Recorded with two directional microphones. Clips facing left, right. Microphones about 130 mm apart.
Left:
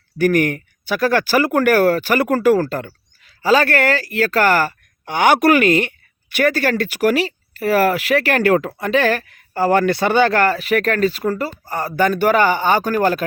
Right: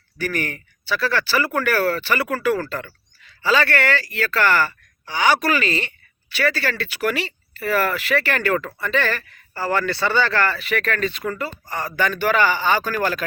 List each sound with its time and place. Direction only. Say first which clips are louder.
0.2 s speech: left 10 dB; 50° left (ahead or behind)
9.9 s speech: left 5 dB; 15° left (ahead or behind)
10.2 s speech: left 6 dB; 50° left (ahead or behind)